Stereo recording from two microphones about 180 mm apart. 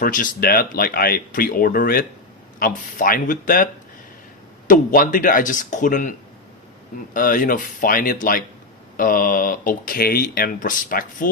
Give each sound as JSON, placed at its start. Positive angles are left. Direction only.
{"t": 0.0, "sound": "speech", "side_deg": 50}
{"t": 4.7, "sound": "speech", "side_deg": 50}